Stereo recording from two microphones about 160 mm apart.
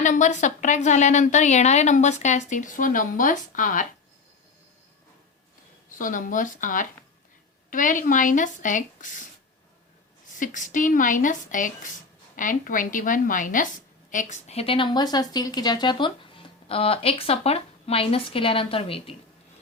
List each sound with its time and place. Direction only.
0.0 s a woman's voice: 50° left (ahead or behind)
6.0 s a woman's voice: 55° left (ahead or behind)
10.3 s a woman's voice: 55° left (ahead or behind); by 19.1 s 35° left (ahead or behind)